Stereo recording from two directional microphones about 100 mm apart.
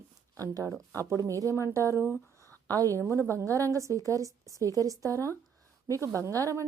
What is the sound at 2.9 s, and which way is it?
Speech, 25° left (ahead or behind).